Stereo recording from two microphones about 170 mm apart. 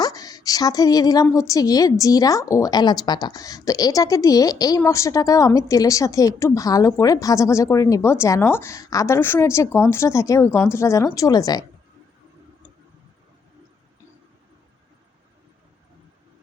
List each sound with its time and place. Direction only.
0.0 s a woman's voice: 20° left (ahead or behind)